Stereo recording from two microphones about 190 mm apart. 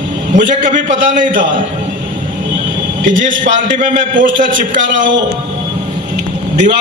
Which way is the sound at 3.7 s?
45° right (ahead or behind).